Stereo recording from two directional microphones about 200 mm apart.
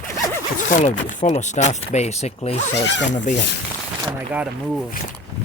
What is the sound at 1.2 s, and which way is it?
Speech, 35° left (ahead or behind).